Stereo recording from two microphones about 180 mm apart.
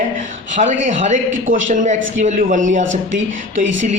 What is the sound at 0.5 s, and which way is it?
Speech, 45° right (ahead or behind).